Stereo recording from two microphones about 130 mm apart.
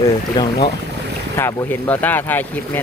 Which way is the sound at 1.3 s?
20° left (ahead or behind).